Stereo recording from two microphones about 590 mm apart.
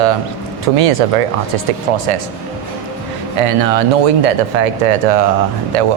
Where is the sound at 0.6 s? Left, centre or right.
Right.